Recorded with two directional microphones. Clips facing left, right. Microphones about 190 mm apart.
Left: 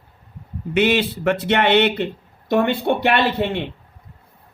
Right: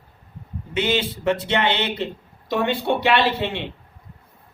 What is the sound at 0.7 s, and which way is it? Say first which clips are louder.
Speech: left 5 dB; 60° left (ahead or behind).